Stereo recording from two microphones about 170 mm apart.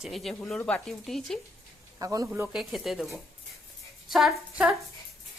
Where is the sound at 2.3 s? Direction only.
5° right (ahead or behind).